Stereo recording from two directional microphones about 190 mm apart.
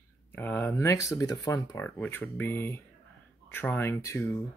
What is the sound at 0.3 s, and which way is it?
Speech, 10° left (ahead or behind).